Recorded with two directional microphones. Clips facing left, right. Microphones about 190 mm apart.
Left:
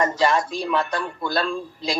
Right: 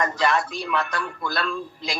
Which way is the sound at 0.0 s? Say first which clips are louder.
Left 3 dB; 25° left (ahead or behind).